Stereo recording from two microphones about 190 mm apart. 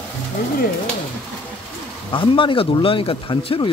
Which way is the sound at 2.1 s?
25° left (ahead or behind).